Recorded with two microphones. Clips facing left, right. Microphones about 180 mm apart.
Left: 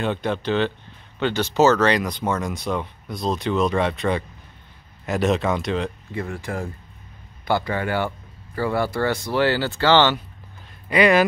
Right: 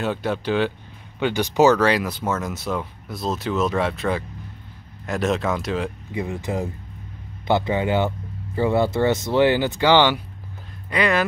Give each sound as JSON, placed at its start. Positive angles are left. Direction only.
{"t": 0.0, "sound": "speech", "side_deg": -5}
{"t": 6.1, "sound": "speech", "side_deg": -20}
{"t": 10.9, "sound": "speech", "side_deg": 10}